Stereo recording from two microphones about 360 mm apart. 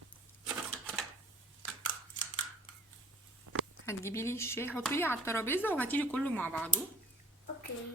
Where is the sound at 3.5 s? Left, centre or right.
Right.